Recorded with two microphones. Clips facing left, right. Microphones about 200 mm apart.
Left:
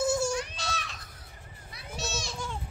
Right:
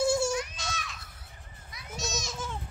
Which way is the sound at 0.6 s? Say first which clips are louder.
Left 2 dB; 35° left (ahead or behind).